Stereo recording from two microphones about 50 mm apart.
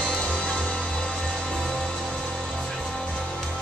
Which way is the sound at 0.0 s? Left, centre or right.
Left.